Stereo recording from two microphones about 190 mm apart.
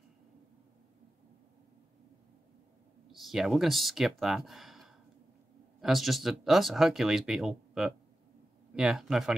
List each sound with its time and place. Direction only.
3.1 s speech: centre (ahead or behind)